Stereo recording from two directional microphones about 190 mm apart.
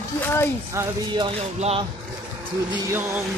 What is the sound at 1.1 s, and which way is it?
Speech, 30° right (ahead or behind).